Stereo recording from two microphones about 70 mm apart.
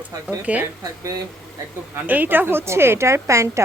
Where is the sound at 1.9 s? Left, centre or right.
Right.